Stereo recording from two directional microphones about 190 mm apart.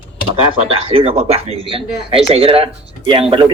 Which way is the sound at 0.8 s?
35° right (ahead or behind).